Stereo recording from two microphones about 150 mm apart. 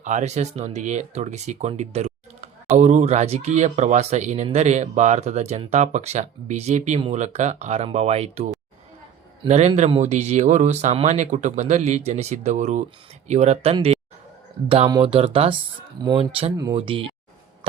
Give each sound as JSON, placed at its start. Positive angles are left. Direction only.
{"t": 0.0, "sound": "speech", "side_deg": -50}
{"t": 9.5, "sound": "speech", "side_deg": -50}
{"t": 15.0, "sound": "speech", "side_deg": -40}